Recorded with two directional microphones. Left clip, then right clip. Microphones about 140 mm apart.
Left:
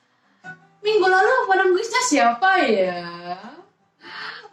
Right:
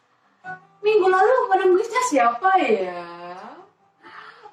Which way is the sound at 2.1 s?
25° left (ahead or behind).